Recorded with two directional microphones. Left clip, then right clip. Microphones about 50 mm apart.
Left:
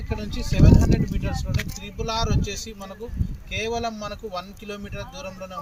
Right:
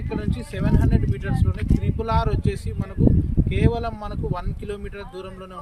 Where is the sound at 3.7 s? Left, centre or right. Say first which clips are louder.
Even; right.